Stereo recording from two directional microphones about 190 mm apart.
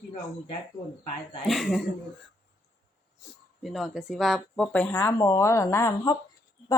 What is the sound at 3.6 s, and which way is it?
A woman's voice, centre (ahead or behind).